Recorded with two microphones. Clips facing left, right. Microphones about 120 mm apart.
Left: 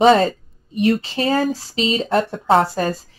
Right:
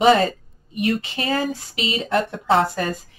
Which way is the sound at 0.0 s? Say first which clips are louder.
Left 3 dB; 30° left (ahead or behind).